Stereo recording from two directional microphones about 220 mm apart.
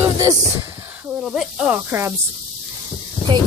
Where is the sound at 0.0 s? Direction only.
15° right (ahead or behind).